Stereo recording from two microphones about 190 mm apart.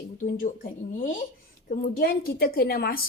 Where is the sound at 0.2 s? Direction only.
40° left (ahead or behind).